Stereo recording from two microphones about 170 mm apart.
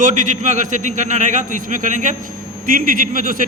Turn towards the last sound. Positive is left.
turn(degrees=-55)  # may be behind; listen again after turning